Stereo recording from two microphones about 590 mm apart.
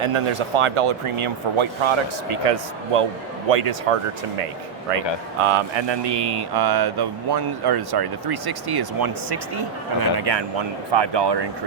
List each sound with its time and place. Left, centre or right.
0.0 s speech: right
5.4 s speech: right